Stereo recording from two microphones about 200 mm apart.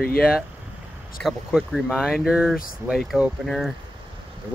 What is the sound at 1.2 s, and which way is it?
Speech, centre (ahead or behind).